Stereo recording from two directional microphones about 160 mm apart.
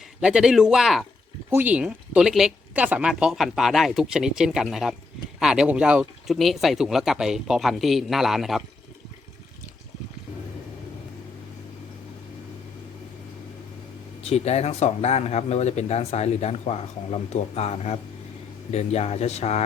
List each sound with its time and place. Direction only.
0.2 s speech: 5° right (ahead or behind)
14.2 s speech: 40° left (ahead or behind)